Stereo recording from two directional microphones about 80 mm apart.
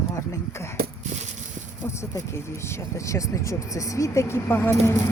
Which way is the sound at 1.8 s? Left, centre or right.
Left.